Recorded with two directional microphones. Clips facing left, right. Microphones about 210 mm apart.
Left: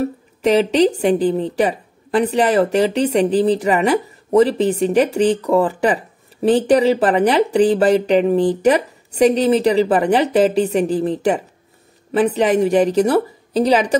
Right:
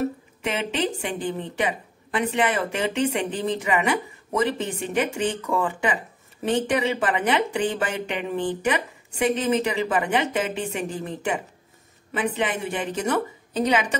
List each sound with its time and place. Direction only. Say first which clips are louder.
0.0 s speech: left 8 dB; 35° left (ahead or behind)